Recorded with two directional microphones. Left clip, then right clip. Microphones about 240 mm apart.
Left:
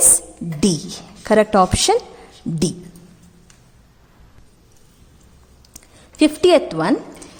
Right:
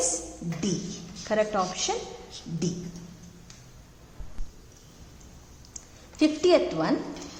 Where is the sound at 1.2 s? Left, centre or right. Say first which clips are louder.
Left 12 dB; left.